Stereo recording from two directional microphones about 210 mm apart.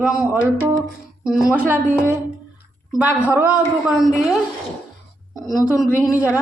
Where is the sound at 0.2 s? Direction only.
5° right (ahead or behind).